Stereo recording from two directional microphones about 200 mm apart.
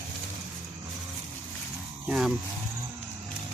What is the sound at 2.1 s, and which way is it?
Speech, 5° right (ahead or behind).